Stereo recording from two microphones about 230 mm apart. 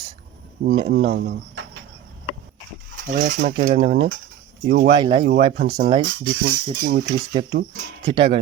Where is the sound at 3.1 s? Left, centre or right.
Right.